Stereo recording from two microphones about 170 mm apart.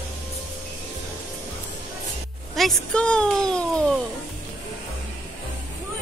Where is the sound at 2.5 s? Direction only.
5° left (ahead or behind).